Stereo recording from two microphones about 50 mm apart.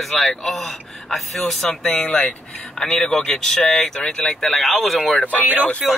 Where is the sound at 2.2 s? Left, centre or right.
Left.